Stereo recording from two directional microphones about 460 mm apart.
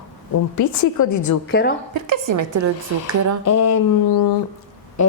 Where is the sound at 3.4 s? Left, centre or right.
Left.